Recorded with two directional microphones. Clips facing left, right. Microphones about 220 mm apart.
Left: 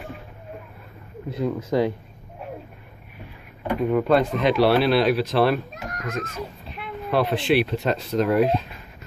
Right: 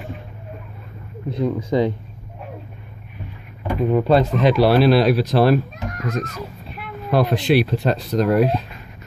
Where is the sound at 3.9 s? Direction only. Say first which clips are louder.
Right 3 dB; 35° right (ahead or behind).